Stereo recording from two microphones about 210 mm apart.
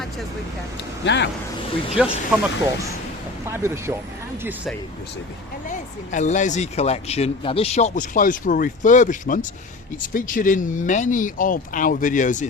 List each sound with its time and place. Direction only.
1.0 s speech: 55° left (ahead or behind)
2.0 s speech: 5° right (ahead or behind)
3.4 s speech: 10° right (ahead or behind)
5.6 s speech: 35° left (ahead or behind)